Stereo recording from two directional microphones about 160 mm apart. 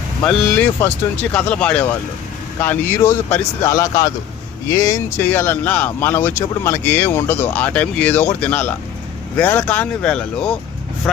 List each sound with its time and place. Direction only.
0.2 s speech: 10° left (ahead or behind)